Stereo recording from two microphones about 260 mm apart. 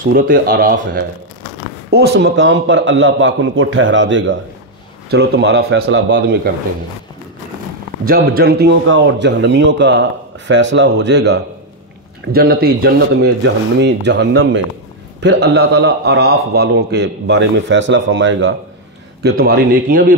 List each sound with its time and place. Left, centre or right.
0.0 s a man's voice: right
8.0 s a man's voice: right